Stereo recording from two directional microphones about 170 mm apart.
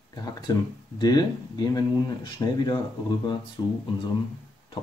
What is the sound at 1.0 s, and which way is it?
Speech, 25° left (ahead or behind).